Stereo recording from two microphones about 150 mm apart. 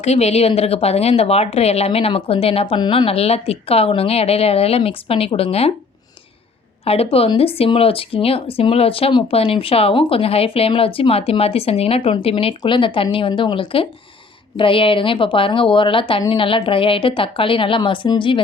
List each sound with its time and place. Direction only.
0.0 s speech: 45° left (ahead or behind)
6.8 s speech: 40° left (ahead or behind)